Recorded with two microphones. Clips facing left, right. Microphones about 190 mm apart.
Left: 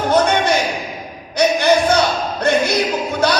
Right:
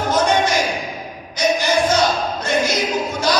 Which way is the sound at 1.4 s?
60° left (ahead or behind).